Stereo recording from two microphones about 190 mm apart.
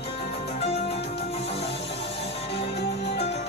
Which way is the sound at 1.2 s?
30° left (ahead or behind).